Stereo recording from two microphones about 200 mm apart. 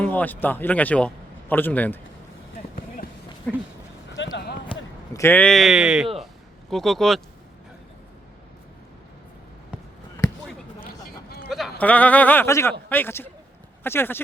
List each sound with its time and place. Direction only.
0.0 s a man's voice: 10° left (ahead or behind)
4.2 s basketball bounce: 55° left (ahead or behind)
4.7 s speech: 15° left (ahead or behind)
11.4 s a sound: centre (ahead or behind)
11.8 s speech: 10° left (ahead or behind)